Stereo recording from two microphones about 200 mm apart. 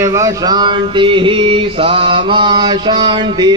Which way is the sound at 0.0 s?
15° right (ahead or behind).